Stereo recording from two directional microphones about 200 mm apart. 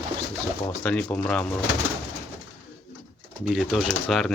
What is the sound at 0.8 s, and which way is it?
Speech, 5° left (ahead or behind).